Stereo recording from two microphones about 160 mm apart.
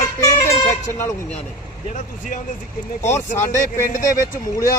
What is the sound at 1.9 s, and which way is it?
Speech, 50° left (ahead or behind).